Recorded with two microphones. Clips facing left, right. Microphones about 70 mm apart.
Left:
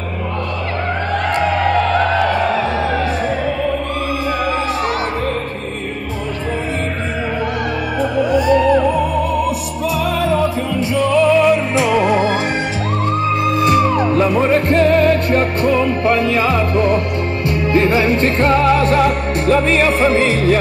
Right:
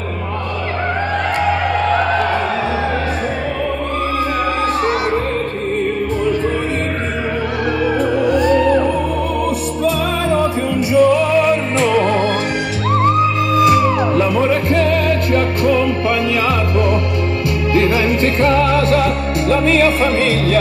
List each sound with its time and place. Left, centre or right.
10.7 s music: centre
13.7 s music: left